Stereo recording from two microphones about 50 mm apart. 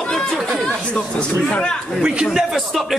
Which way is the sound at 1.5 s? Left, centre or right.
Centre.